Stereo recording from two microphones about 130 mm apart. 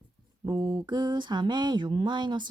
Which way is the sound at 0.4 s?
35° right (ahead or behind).